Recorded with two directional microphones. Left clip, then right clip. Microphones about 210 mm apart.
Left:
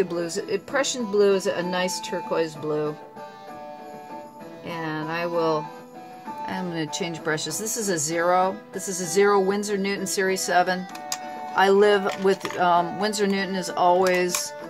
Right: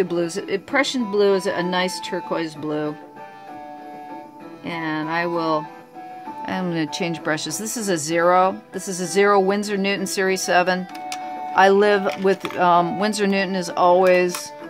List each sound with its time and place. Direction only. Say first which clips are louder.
0.0 s speech: right 3 dB; 35° right (ahead or behind)
4.6 s speech: right 4 dB; 35° right (ahead or behind)